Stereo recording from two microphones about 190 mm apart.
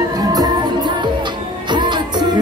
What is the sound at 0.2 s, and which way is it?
Music, 20° right (ahead or behind).